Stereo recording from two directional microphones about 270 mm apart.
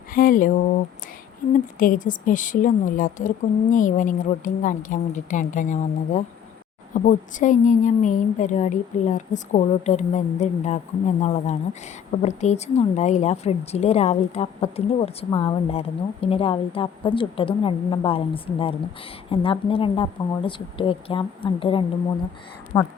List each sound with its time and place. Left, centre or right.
0.1 s a sound: left
1.8 s speech: left
22.7 s speech: centre